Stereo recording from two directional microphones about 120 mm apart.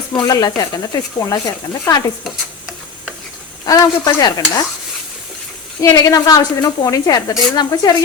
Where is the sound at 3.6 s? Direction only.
35° left (ahead or behind).